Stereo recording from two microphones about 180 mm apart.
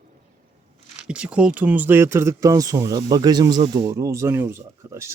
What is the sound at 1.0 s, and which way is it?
Speech, 5° right (ahead or behind).